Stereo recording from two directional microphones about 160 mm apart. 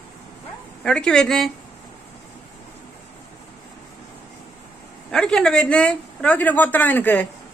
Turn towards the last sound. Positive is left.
turn(degrees=10)  # may be behind; listen again after turning